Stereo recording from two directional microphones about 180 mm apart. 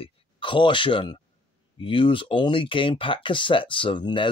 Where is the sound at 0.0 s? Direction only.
30° left (ahead or behind).